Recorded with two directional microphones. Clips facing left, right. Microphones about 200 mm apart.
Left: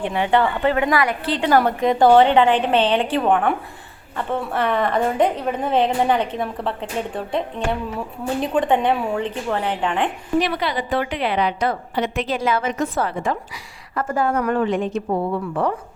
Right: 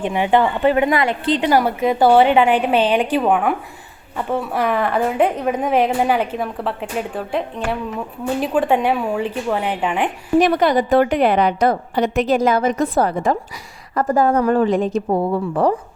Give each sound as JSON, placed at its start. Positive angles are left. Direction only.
{"t": 0.0, "sound": "a woman's voice", "side_deg": -15}
{"t": 10.3, "sound": "a woman's voice", "side_deg": -45}